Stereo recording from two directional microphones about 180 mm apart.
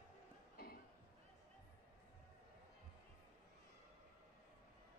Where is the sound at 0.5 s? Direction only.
55° left (ahead or behind).